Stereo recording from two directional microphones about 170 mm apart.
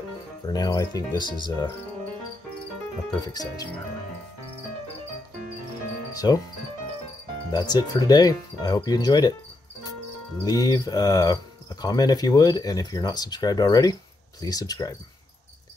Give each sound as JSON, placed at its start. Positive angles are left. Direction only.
{"t": 0.5, "sound": "cricket", "side_deg": 25}
{"t": 3.2, "sound": "cricket", "side_deg": 20}
{"t": 6.1, "sound": "cricket", "side_deg": 20}
{"t": 7.5, "sound": "cricket", "side_deg": 25}
{"t": 10.4, "sound": "cricket", "side_deg": 20}